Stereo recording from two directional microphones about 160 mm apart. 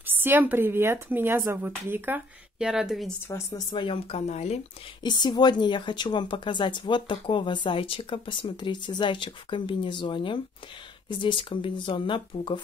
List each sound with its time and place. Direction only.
0.0 s speech: 10° right (ahead or behind)
3.3 s speech: 20° left (ahead or behind)
3.7 s speech: 35° left (ahead or behind)
5.0 s a woman's voice: 25° left (ahead or behind)